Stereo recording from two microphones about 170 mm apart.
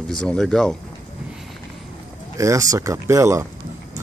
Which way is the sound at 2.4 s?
20° right (ahead or behind).